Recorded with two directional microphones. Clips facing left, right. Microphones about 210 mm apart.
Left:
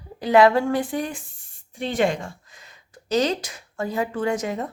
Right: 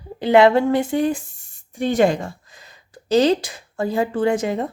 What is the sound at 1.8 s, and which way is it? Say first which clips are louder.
Speech: right 5 dB; 40° right (ahead or behind).